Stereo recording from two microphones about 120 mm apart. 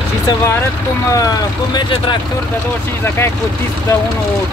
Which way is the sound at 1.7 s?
40° left (ahead or behind).